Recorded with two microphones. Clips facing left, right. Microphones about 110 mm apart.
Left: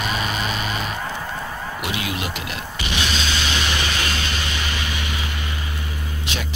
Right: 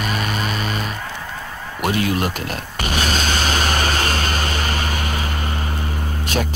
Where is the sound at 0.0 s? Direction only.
45° right (ahead or behind).